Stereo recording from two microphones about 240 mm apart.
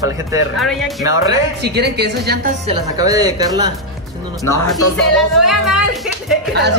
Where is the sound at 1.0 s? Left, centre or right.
Centre.